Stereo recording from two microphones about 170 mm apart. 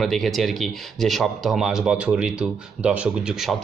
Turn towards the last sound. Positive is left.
turn(degrees=-5)  # may be behind; listen again after turning